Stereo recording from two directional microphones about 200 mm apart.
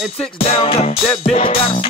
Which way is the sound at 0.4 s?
30° left (ahead or behind).